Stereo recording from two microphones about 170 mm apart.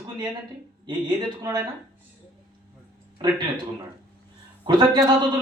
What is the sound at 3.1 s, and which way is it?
Speech, 25° right (ahead or behind).